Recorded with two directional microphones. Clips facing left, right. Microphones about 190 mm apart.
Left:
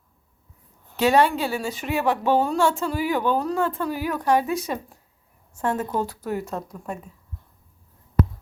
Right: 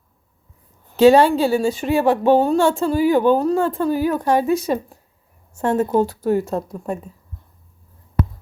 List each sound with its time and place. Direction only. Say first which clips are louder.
0.9 s a woman's voice: right 7 dB; 30° right (ahead or behind)
3.2 s speech: right 7 dB; 45° right (ahead or behind)
3.4 s a woman's voice: right 6 dB; 30° right (ahead or behind)